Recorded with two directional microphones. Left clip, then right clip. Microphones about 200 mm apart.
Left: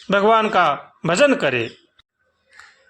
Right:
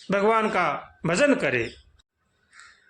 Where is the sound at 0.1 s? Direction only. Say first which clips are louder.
Left 6 dB; 15° left (ahead or behind).